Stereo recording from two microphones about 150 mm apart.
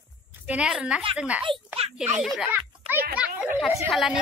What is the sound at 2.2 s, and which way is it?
Speech, 5° right (ahead or behind).